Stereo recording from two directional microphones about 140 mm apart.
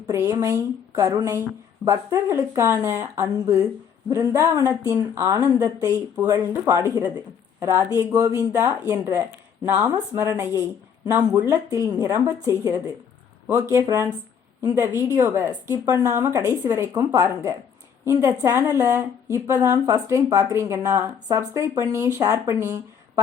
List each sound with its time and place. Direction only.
0.1 s a woman's voice: 20° right (ahead or behind)